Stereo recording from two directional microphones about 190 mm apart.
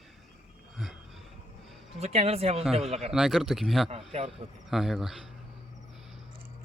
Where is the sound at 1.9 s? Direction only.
35° right (ahead or behind).